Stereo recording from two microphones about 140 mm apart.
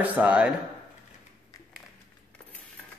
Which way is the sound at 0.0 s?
10° right (ahead or behind).